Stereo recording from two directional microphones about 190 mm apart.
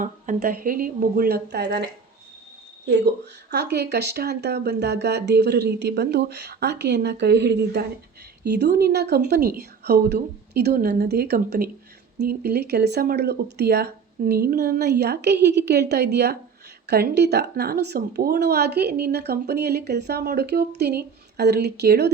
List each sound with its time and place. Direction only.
0.0 s speech: 45° right (ahead or behind); by 1.9 s 60° right (ahead or behind)
3.5 s a woman's voice: 60° right (ahead or behind)